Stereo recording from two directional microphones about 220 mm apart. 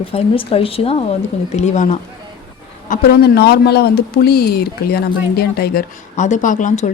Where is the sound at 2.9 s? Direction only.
45° left (ahead or behind).